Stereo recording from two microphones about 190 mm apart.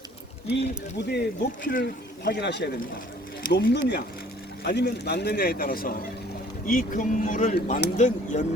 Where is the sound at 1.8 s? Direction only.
65° left (ahead or behind).